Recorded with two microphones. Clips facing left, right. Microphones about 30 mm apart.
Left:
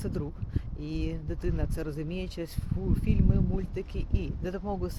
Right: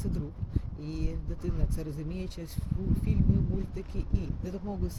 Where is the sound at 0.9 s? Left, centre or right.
Left.